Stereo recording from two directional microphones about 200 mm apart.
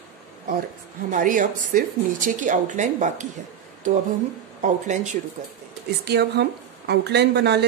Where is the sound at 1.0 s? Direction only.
40° right (ahead or behind).